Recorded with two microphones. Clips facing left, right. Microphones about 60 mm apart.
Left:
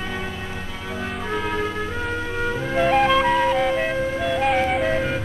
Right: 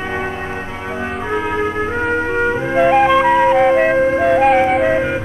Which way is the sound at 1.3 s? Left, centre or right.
Right.